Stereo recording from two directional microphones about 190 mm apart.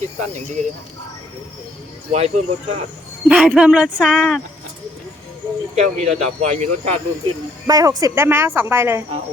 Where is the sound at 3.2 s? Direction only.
5° right (ahead or behind).